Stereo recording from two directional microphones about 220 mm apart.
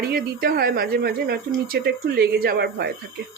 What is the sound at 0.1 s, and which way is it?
Speech, 40° right (ahead or behind).